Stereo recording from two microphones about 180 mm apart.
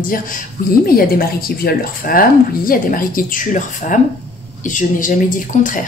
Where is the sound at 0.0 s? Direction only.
50° left (ahead or behind).